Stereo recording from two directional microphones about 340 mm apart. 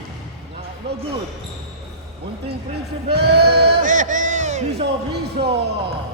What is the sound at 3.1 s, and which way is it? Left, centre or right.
Speech, right.